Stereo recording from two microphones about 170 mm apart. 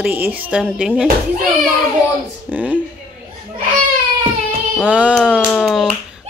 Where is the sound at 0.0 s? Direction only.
10° right (ahead or behind).